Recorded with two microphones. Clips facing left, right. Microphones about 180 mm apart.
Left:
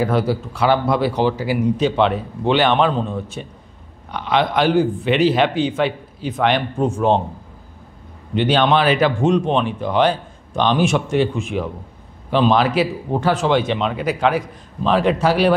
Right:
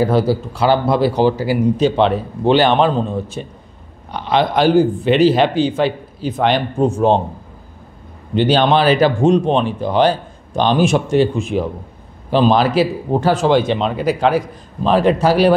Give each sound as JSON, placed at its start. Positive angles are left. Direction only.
{"t": 0.0, "sound": "speech", "side_deg": -35}
{"t": 8.4, "sound": "speech", "side_deg": -35}